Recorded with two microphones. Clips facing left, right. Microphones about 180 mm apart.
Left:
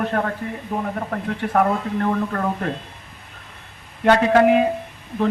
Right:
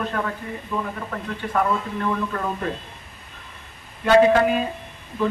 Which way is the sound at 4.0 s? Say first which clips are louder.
Left 1 dB; 60° left (ahead or behind).